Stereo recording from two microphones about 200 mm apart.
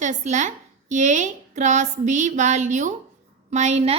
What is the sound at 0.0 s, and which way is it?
A woman's voice, 35° right (ahead or behind).